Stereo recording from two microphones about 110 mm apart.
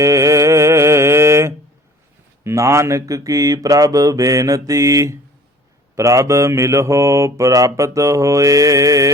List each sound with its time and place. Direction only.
0.0 s mantra: 30° right (ahead or behind)
2.4 s speech: 25° right (ahead or behind)
6.0 s mantra: 30° right (ahead or behind)